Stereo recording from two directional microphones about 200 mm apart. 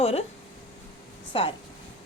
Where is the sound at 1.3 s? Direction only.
25° left (ahead or behind).